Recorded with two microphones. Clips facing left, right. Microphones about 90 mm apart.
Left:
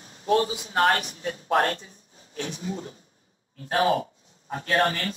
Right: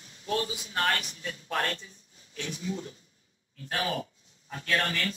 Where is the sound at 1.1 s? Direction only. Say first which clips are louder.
Left 9 dB; 40° left (ahead or behind).